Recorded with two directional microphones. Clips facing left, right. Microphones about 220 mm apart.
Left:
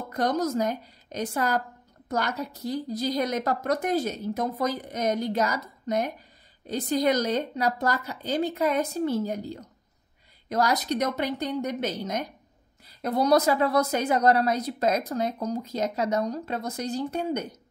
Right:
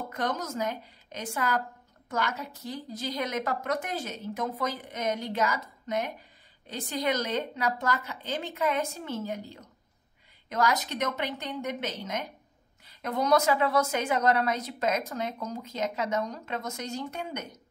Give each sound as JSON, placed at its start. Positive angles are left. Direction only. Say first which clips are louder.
{"t": 0.1, "sound": "a woman's voice", "louder": "left 9 dB", "side_deg": 35}